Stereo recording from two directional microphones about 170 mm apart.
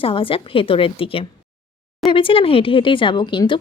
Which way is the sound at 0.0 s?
30° left (ahead or behind).